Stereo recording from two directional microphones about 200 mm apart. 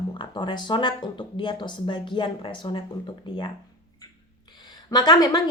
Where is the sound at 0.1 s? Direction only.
25° left (ahead or behind).